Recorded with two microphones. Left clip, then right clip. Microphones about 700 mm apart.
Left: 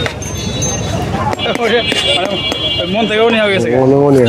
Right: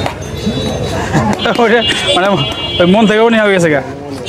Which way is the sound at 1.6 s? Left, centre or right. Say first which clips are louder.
Right 4 dB; right.